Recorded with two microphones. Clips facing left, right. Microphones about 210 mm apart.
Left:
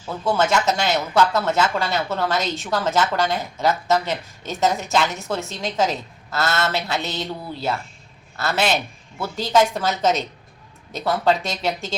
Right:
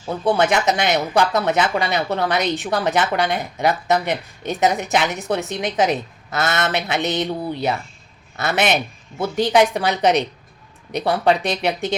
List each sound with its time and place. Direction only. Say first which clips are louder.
0.0 s a man's voice: right 3 dB; 15° right (ahead or behind)
11.4 s speech: right 4 dB; 15° right (ahead or behind)